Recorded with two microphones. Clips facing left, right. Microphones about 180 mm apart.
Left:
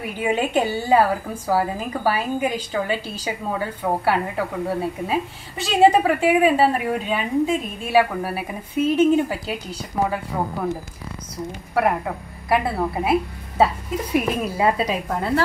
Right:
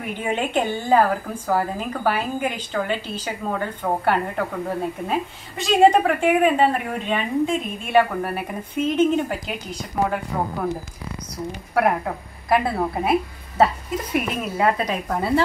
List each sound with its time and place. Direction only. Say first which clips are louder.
0.2 s a woman's voice: left 3 dB; 10° left (ahead or behind)